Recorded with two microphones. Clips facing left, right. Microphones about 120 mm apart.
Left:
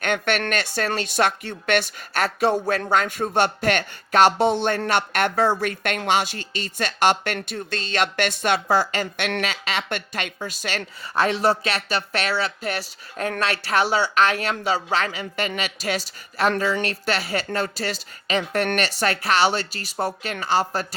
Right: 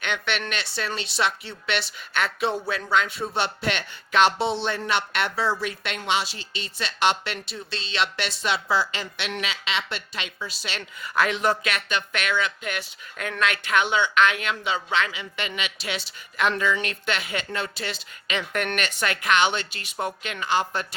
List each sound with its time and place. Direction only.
0.0 s speech: 45° left (ahead or behind)
11.0 s a man's voice: 30° left (ahead or behind)